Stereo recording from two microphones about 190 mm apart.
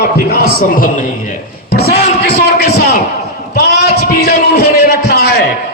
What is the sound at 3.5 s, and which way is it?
A man's voice, 55° left (ahead or behind).